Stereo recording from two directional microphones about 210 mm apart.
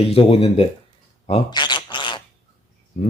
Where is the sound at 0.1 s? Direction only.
25° left (ahead or behind).